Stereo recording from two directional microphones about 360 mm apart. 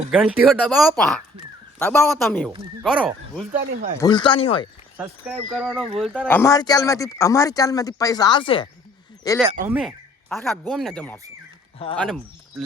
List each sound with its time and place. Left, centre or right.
0.1 s speech: centre
3.5 s speech: right
3.9 s speech: centre
4.9 s speech: centre
9.4 s speech: centre
9.6 s speech: centre